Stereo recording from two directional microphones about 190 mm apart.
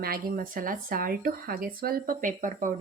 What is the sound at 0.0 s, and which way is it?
Speech, 50° right (ahead or behind).